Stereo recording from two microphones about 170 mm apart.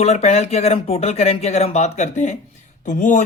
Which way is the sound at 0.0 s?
40° left (ahead or behind).